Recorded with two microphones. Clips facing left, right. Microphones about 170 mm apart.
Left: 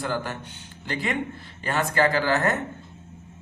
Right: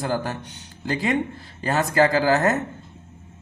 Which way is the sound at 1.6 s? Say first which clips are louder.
Right 3 dB; 40° right (ahead or behind).